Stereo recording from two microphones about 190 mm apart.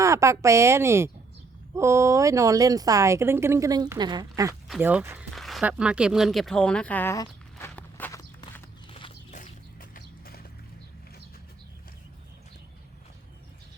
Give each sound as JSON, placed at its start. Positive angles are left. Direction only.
{"t": 0.0, "sound": "a woman's voice", "side_deg": -15}
{"t": 4.7, "sound": "speech", "side_deg": -5}
{"t": 8.9, "sound": "horse", "side_deg": 30}
{"t": 9.9, "sound": "clip-clop", "side_deg": 50}